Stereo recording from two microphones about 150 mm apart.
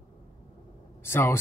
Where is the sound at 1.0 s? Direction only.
15° left (ahead or behind).